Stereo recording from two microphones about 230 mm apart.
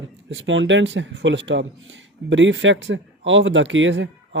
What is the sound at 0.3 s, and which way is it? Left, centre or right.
Speech, right.